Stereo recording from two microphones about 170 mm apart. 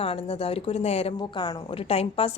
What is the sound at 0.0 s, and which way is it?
A woman's voice, 35° left (ahead or behind).